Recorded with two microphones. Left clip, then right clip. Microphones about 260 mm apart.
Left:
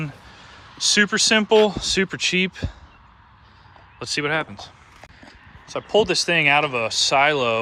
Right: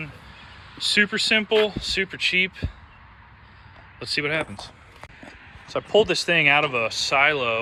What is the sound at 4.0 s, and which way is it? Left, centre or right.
Speech, centre.